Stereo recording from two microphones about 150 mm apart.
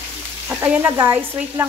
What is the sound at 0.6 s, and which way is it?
Speech, 20° right (ahead or behind).